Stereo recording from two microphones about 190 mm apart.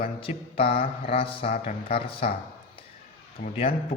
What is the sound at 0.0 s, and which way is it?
A man's voice, 30° left (ahead or behind).